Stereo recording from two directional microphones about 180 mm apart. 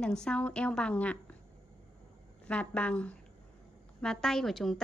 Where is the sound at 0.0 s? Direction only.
5° left (ahead or behind).